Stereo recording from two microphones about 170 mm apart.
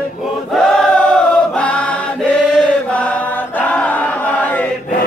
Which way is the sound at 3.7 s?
10° left (ahead or behind).